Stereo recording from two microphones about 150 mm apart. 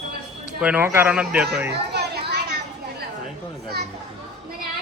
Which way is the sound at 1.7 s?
90° right.